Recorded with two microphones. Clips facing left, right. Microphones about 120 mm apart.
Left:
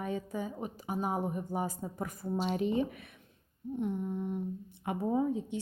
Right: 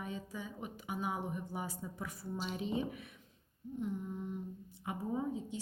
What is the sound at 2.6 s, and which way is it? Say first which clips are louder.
A woman's voice: left 6 dB; 60° left (ahead or behind).